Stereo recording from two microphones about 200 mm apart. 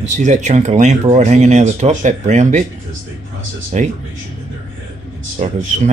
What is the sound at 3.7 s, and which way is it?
Speech, 35° right (ahead or behind).